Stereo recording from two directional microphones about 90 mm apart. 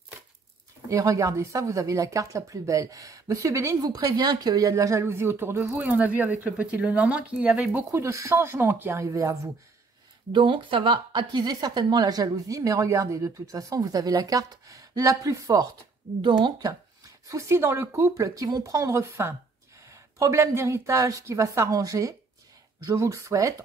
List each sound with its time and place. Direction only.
0.8 s speech: 35° right (ahead or behind); by 8.0 s 20° right (ahead or behind)
8.0 s speech: 35° right (ahead or behind)
9.0 s speech: 35° right (ahead or behind)
10.3 s a woman's voice: 65° right (ahead or behind); by 15.7 s 40° right (ahead or behind)
16.2 s speech: 65° right (ahead or behind); by 23.5 s 35° right (ahead or behind)